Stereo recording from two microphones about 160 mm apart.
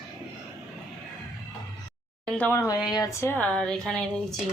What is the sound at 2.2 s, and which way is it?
A man's voice, 10° left (ahead or behind).